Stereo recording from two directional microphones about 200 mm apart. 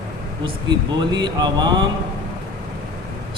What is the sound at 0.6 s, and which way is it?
Music, 20° right (ahead or behind).